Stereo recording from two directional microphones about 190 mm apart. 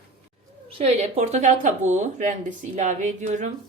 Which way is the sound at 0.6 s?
30° right (ahead or behind).